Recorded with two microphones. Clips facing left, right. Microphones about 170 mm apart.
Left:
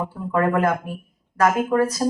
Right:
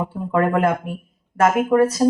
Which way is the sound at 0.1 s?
25° right (ahead or behind).